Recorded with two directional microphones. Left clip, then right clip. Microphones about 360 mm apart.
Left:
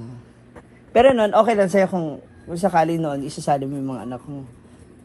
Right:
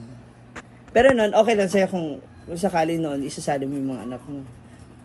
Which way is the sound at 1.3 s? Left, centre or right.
Left.